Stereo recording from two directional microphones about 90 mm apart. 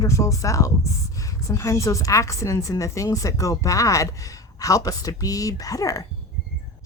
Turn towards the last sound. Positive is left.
turn(degrees=40)  # may be behind; listen again after turning